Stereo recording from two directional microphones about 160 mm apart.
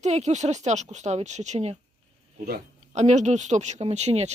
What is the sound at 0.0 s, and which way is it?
Speech, 45° right (ahead or behind).